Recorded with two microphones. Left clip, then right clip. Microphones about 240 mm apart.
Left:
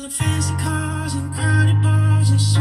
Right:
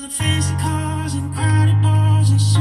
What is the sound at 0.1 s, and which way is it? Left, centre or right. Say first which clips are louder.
Music: right 3 dB; left.